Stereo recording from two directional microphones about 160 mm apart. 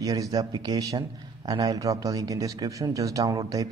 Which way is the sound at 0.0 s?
20° right (ahead or behind).